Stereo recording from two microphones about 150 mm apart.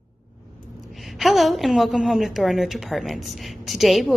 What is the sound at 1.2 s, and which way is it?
A woman's voice, centre (ahead or behind).